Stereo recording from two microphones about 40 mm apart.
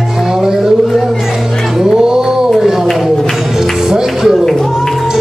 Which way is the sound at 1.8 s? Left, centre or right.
Centre.